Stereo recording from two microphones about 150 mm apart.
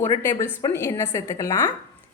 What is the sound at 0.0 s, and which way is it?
A woman's voice, 20° left (ahead or behind).